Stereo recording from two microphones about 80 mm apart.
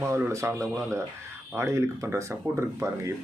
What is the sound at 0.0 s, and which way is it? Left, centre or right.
Speech, right.